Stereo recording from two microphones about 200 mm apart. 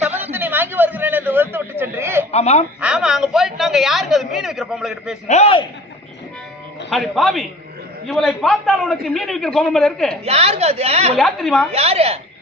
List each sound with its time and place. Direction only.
0.1 s a sound: 10° right (ahead or behind)
2.3 s speech: 30° left (ahead or behind)
2.8 s a man's voice: 5° right (ahead or behind)
5.3 s a man's voice: 30° left (ahead or behind)
6.9 s a man's voice: centre (ahead or behind)
10.2 s a woman's voice: 30° right (ahead or behind)
11.2 s a man's voice: centre (ahead or behind)
11.7 s a woman's voice: 30° right (ahead or behind)